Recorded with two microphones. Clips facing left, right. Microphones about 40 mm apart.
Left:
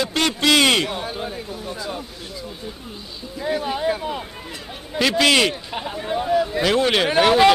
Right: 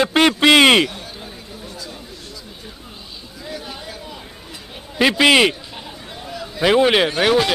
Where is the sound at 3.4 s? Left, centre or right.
Left.